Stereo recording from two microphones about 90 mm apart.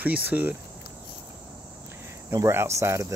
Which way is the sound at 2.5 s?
30° right (ahead or behind).